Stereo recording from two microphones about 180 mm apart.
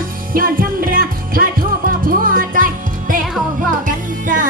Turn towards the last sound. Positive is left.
turn(degrees=-50)  # may be behind; listen again after turning